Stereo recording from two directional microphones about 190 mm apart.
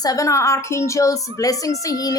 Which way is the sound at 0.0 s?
20° left (ahead or behind).